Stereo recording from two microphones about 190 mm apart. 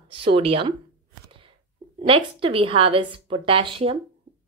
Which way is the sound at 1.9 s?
30° right (ahead or behind).